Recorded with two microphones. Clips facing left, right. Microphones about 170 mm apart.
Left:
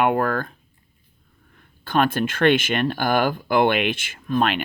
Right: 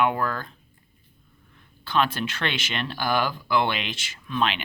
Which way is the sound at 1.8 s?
50° left (ahead or behind).